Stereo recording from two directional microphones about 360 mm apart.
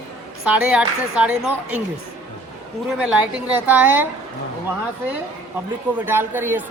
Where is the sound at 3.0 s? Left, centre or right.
Centre.